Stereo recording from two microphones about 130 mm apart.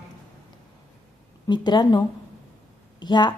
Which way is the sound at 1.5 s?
35° left (ahead or behind).